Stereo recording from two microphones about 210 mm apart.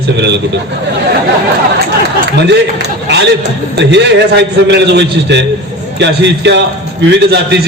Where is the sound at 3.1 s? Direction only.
55° right (ahead or behind).